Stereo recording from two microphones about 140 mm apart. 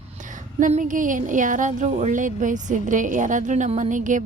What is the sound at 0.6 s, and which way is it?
Speech, 65° right (ahead or behind).